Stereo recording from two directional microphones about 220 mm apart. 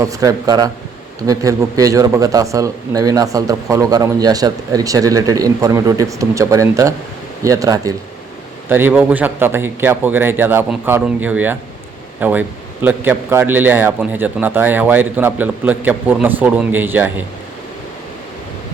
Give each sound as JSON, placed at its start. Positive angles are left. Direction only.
{"t": 0.0, "sound": "a man's voice", "side_deg": -15}